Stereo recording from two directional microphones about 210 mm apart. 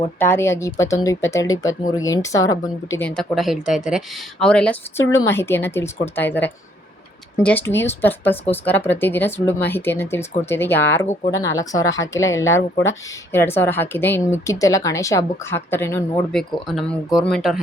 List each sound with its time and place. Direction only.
0.2 s speech: 10° left (ahead or behind)
3.2 s speech: centre (ahead or behind)